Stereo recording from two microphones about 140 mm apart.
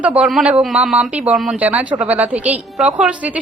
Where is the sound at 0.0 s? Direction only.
10° right (ahead or behind).